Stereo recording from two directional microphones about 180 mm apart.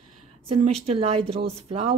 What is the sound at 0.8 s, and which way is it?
Speech, 35° right (ahead or behind).